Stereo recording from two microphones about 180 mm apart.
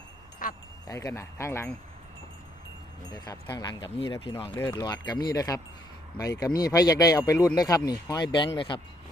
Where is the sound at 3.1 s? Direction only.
20° left (ahead or behind).